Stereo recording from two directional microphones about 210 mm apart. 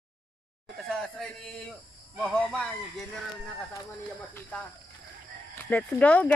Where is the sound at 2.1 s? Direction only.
5° left (ahead or behind).